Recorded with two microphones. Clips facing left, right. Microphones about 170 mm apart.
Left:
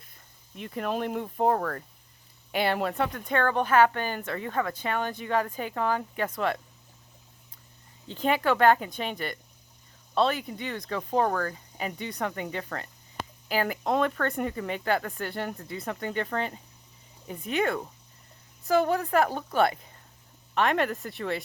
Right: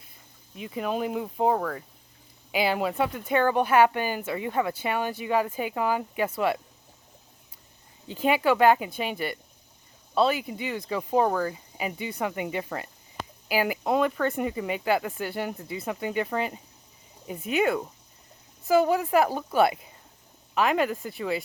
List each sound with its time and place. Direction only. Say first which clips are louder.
0.5 s speech: right 1 dB; 5° right (ahead or behind)
8.0 s speech: right 2 dB; 10° right (ahead or behind)